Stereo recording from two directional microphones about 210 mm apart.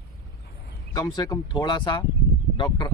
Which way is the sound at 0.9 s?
20° left (ahead or behind).